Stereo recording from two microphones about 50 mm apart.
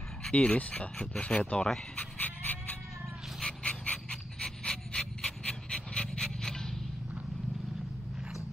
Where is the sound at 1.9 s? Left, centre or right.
Left.